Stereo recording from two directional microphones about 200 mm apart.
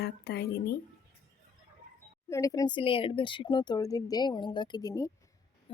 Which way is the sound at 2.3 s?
15° left (ahead or behind).